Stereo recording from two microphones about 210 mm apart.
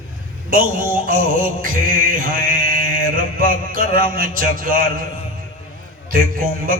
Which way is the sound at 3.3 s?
45° right (ahead or behind).